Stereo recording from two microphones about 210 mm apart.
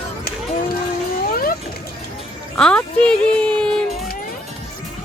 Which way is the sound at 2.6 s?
5° left (ahead or behind).